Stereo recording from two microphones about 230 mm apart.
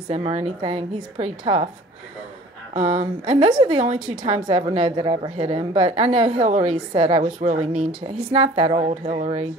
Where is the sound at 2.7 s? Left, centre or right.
Right.